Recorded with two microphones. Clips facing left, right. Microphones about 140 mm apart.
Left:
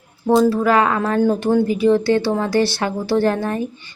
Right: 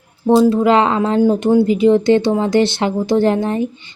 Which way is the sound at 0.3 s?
15° right (ahead or behind).